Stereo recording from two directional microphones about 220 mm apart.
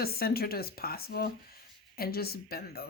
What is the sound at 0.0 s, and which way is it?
Speech, 45° left (ahead or behind).